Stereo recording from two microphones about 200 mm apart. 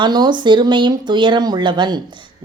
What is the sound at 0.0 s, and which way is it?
Speech, 20° right (ahead or behind).